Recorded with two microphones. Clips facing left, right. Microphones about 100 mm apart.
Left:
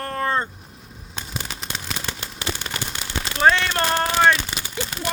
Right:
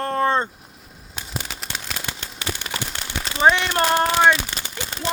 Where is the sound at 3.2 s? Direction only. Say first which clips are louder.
Right 1 dB; 5° right (ahead or behind).